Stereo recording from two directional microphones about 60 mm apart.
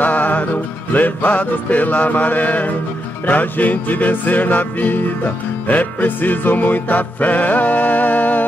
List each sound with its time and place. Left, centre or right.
0.0 s music: left